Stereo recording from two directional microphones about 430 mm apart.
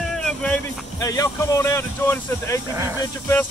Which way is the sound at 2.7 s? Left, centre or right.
Centre.